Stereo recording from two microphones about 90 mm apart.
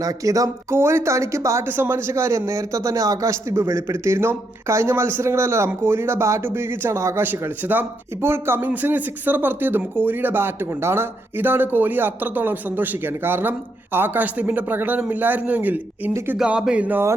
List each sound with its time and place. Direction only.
0.0 s speech: 40° right (ahead or behind)
7.3 s speech: 20° right (ahead or behind)
16.4 s speech: 10° right (ahead or behind)